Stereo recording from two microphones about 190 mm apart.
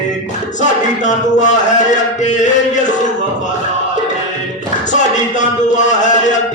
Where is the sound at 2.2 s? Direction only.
40° left (ahead or behind).